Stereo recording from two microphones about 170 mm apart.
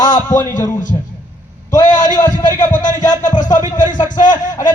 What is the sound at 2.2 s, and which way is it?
A man's voice, 50° left (ahead or behind).